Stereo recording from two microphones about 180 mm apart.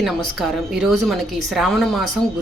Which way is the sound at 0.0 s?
Centre (ahead or behind).